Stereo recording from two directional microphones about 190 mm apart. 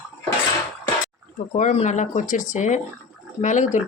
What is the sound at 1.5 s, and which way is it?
Speech, 40° left (ahead or behind).